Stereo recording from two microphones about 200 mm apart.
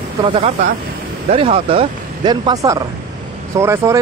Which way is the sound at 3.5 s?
15° right (ahead or behind).